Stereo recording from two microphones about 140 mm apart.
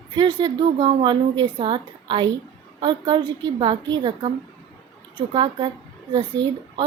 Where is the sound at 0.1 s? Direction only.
35° right (ahead or behind).